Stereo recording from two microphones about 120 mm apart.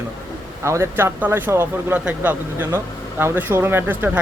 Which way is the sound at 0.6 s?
20° right (ahead or behind).